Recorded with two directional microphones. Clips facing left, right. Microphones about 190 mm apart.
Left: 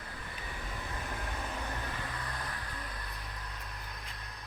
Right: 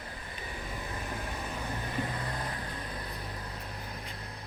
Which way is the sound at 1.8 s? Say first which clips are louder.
Right 5 dB; 25° right (ahead or behind).